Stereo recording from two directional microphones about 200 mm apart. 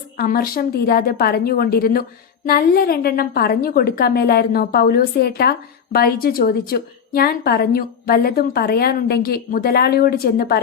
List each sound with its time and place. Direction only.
0.2 s a woman's voice: 50° left (ahead or behind)